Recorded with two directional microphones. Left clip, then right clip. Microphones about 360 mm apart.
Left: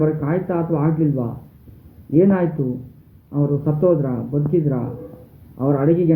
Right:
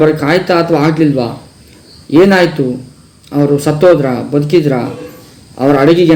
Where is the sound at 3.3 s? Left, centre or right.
Right.